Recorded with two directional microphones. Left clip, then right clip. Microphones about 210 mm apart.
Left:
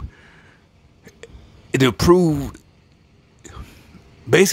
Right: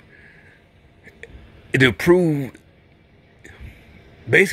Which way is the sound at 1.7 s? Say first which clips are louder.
Even; 20° left (ahead or behind).